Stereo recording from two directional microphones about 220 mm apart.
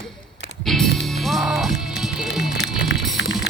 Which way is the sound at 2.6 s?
60° left (ahead or behind).